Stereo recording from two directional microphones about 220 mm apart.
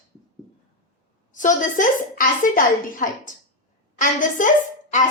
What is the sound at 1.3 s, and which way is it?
A woman's voice, 35° left (ahead or behind).